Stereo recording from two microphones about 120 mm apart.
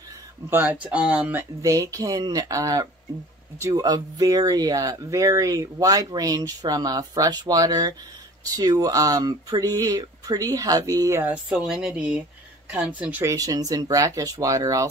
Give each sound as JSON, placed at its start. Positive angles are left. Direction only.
{"t": 0.5, "sound": "speech", "side_deg": -15}
{"t": 1.6, "sound": "speech", "side_deg": -30}
{"t": 11.4, "sound": "speech", "side_deg": -5}
{"t": 13.2, "sound": "speech", "side_deg": -25}